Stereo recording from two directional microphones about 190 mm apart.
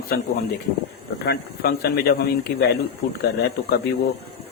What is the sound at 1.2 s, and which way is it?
Speech, 55° left (ahead or behind).